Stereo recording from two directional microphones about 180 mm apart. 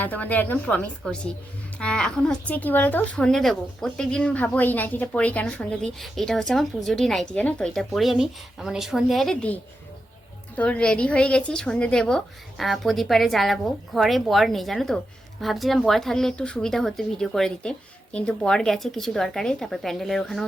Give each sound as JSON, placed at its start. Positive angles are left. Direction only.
{"t": 0.0, "sound": "a woman's voice", "side_deg": 10}
{"t": 10.6, "sound": "speech", "side_deg": 5}